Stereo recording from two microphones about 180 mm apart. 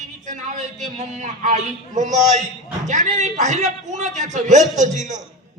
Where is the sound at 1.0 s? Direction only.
45° right (ahead or behind).